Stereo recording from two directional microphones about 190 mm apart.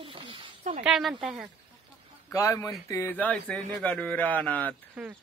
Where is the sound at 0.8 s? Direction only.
Centre (ahead or behind).